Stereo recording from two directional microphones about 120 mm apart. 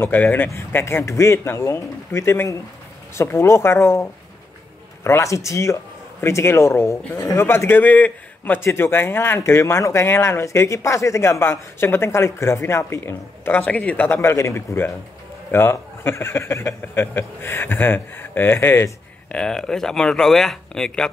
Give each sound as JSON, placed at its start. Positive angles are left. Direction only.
{"t": 0.0, "sound": "speech", "side_deg": 15}
{"t": 19.3, "sound": "speech", "side_deg": 5}